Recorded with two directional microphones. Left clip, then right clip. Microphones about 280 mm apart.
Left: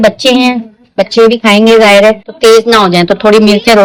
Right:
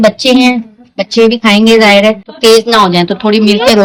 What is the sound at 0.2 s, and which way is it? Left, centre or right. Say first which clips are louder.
Speech: even; centre.